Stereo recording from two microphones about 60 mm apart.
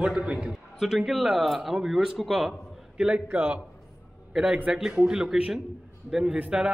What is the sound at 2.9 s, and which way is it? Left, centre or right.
Speech, centre.